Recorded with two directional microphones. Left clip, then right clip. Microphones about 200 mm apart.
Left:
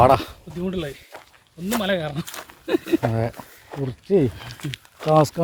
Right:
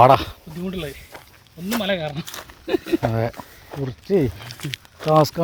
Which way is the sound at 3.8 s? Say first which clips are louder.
Left 1 dB; 5° left (ahead or behind).